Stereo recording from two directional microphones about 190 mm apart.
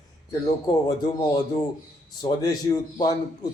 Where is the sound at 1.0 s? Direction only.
20° left (ahead or behind).